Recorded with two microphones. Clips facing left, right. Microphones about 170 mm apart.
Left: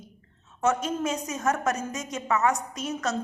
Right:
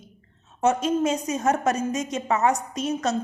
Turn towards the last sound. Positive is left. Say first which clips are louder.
# right 5 dB
turn(degrees=-20)  # may be behind; listen again after turning